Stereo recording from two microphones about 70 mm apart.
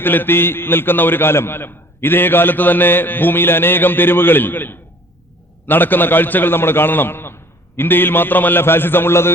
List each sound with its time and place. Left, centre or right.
0.0 s a man's voice: left